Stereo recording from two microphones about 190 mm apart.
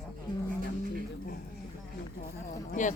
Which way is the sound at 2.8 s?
40° left (ahead or behind).